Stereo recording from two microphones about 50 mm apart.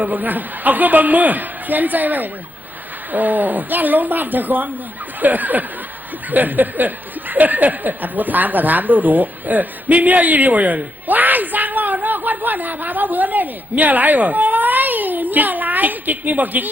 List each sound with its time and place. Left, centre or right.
0.0 s speech: right